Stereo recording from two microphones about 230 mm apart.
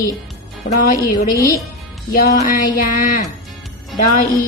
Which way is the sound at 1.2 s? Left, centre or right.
Left.